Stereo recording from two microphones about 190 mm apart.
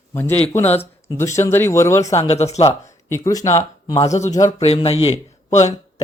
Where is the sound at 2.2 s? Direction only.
35° left (ahead or behind).